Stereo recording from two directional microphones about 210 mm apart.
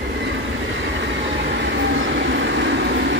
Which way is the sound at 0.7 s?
60° right (ahead or behind).